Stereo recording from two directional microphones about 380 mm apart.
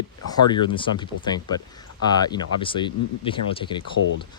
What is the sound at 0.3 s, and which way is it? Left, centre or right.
Speech, centre.